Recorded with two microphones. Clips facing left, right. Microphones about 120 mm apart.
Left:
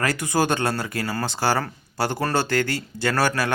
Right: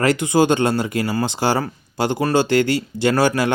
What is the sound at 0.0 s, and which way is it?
Speech, 25° right (ahead or behind).